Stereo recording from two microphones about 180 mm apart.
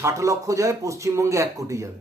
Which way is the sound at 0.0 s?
15° right (ahead or behind).